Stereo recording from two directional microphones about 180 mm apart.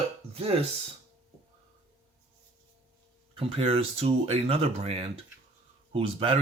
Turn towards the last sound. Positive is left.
turn(degrees=-30)  # may be behind; listen again after turning